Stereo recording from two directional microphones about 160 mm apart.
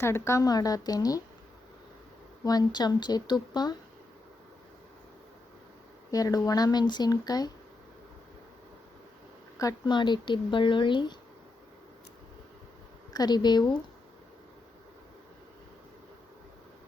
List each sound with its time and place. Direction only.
0.0 s speech: 15° left (ahead or behind)
2.4 s speech: 25° left (ahead or behind)
6.1 s speech: 20° left (ahead or behind)
9.6 s speech: 25° left (ahead or behind)
13.1 s speech: 25° left (ahead or behind)